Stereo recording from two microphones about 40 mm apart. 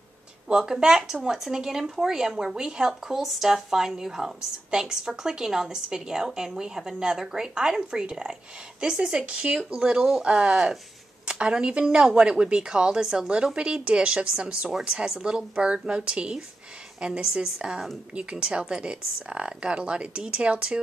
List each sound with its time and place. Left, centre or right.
0.5 s a woman's voice: centre